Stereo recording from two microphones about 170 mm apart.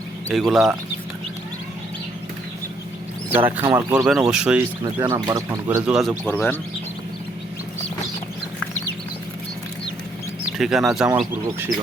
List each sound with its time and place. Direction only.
0.3 s speech: centre (ahead or behind)
3.6 s speech: 25° right (ahead or behind)
3.9 s speech: 5° right (ahead or behind)
4.9 s speech: 20° right (ahead or behind)
5.8 s speech: centre (ahead or behind)
10.6 s speech: centre (ahead or behind)